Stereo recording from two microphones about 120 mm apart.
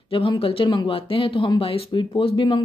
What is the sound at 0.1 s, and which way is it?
Speech, 50° left (ahead or behind).